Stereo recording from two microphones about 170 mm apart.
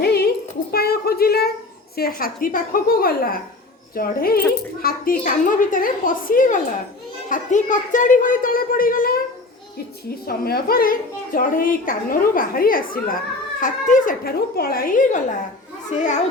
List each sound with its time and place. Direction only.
0.0 s a sound: 65° left (ahead or behind)
2.0 s a woman's voice: 60° left (ahead or behind)
10.2 s a woman's voice: 65° left (ahead or behind); by 16.2 s 45° left (ahead or behind)